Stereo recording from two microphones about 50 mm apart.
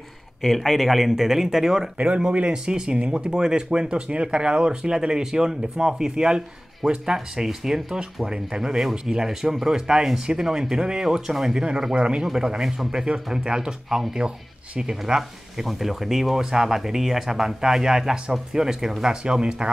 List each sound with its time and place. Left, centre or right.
0.4 s speech: centre
2.0 s speech: right